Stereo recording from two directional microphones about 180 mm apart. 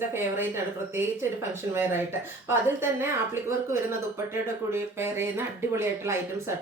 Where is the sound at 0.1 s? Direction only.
15° right (ahead or behind).